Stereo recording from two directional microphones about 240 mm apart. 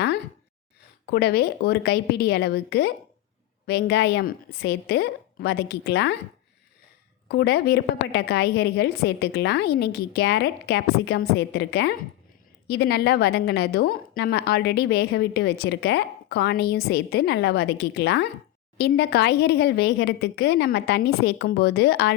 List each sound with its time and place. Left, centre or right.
1.0 s a woman's voice: left
7.3 s a woman's voice: left